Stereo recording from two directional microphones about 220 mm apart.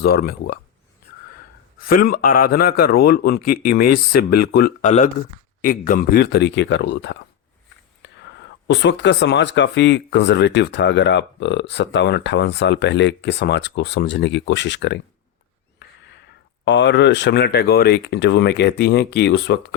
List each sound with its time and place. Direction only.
0.0 s speech: 45° left (ahead or behind)
1.9 s speech: 40° left (ahead or behind)
4.9 s speech: 35° left (ahead or behind); by 14.9 s 50° left (ahead or behind)
15.8 s a sound: 50° left (ahead or behind)
16.6 s speech: 50° left (ahead or behind)